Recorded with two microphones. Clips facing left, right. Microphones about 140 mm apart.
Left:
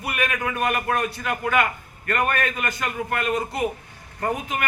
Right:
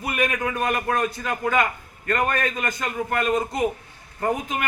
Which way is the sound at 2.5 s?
25° right (ahead or behind).